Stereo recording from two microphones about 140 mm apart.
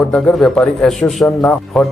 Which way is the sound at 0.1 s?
5° left (ahead or behind).